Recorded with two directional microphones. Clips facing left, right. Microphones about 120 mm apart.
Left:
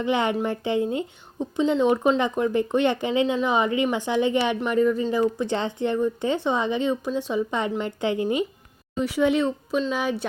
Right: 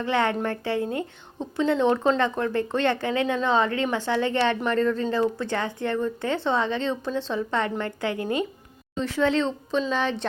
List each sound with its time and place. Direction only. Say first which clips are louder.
0.0 s a woman's voice: left 1 dB; 15° left (ahead or behind)